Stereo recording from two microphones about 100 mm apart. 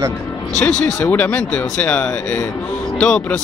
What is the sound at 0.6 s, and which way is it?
A man's voice, 15° left (ahead or behind).